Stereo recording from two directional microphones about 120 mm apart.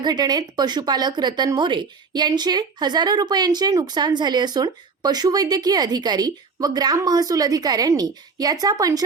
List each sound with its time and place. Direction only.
0.0 s speech: 35° right (ahead or behind)